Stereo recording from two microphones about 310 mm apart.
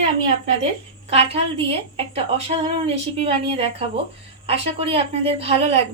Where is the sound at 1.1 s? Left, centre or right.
Centre.